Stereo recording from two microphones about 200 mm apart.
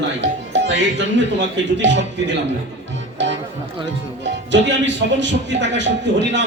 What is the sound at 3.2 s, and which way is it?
Music, 65° right (ahead or behind).